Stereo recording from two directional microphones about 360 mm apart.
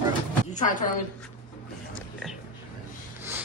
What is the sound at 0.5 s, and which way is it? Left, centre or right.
Speech, left.